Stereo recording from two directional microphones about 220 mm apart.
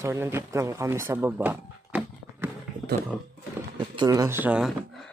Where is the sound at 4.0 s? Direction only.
15° right (ahead or behind).